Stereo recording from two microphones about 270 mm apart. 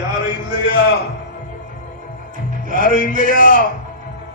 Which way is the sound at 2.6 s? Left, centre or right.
Right.